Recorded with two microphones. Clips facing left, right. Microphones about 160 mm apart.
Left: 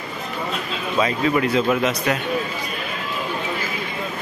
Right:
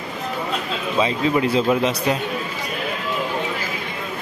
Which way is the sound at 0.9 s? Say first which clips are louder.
Even; 20° right (ahead or behind).